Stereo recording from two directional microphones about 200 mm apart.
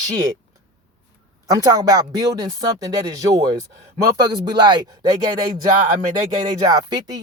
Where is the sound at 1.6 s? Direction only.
20° right (ahead or behind).